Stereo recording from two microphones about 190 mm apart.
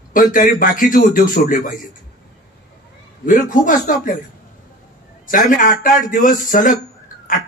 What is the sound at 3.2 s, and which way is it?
Speech, 45° left (ahead or behind).